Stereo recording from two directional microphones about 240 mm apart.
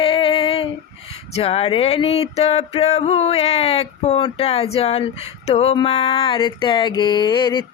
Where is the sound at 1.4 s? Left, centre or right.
Left.